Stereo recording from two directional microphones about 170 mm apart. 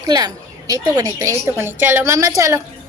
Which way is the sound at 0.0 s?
20° right (ahead or behind).